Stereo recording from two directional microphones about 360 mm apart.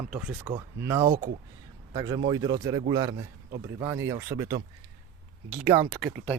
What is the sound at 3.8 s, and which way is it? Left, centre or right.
Speech, centre.